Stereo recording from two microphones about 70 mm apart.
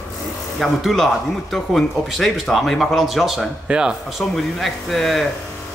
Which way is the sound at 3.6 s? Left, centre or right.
Centre.